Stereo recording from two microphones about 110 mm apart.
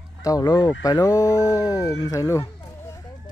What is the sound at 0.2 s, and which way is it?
Speech, 35° left (ahead or behind).